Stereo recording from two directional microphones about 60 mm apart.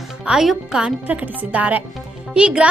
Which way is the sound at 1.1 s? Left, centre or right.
Right.